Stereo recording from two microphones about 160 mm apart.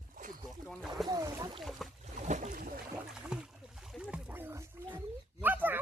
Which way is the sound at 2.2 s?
50° right (ahead or behind).